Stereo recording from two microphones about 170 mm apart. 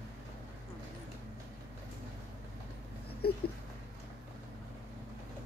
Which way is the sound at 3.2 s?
65° left (ahead or behind).